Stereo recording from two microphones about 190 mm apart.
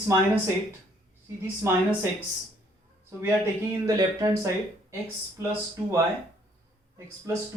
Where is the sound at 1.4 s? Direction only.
15° right (ahead or behind).